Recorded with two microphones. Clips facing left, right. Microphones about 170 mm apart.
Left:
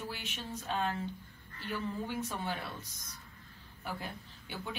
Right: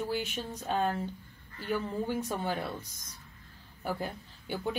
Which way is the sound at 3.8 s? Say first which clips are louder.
Right 6 dB; 45° right (ahead or behind).